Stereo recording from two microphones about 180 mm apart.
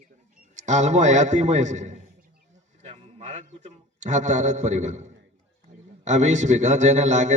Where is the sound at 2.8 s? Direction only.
35° right (ahead or behind).